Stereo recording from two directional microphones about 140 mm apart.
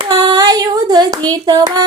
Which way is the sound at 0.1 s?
30° right (ahead or behind).